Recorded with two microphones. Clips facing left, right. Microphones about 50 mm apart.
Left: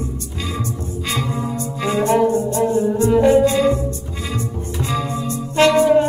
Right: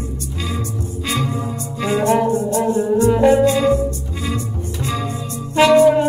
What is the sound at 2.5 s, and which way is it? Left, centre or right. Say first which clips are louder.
Music: even; right.